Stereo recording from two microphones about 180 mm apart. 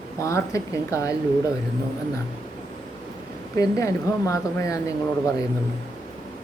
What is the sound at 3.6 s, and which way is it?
Speech, 15° left (ahead or behind).